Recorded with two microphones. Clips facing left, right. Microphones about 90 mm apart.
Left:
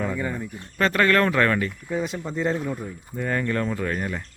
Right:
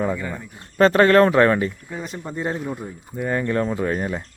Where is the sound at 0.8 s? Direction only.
30° right (ahead or behind).